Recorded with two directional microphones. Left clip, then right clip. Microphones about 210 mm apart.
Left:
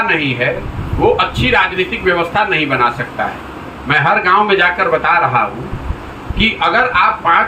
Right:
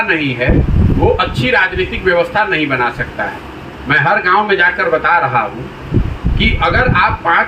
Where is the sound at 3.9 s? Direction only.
20° left (ahead or behind).